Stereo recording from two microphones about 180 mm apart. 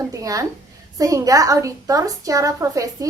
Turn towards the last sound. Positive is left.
turn(degrees=-20)  # may be behind; listen again after turning